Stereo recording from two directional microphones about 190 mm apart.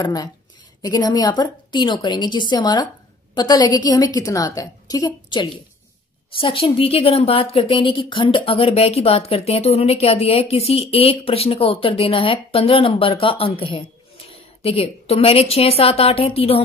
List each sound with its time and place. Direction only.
0.0 s a woman's voice: 20° left (ahead or behind)